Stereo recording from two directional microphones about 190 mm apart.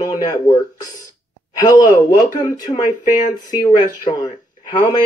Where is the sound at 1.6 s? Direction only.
20° left (ahead or behind).